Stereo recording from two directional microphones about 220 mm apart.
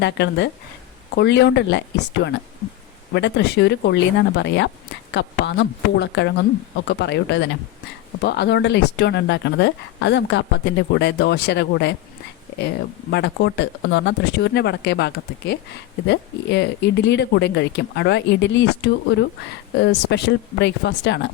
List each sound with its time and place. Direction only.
0.0 s speech: 50° left (ahead or behind)
3.2 s speech: 50° left (ahead or behind)